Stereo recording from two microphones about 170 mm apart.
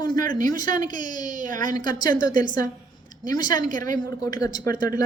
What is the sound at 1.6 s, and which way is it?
Speech, 25° left (ahead or behind).